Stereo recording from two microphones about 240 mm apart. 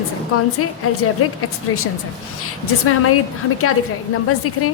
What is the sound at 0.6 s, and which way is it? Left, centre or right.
A woman's voice, left.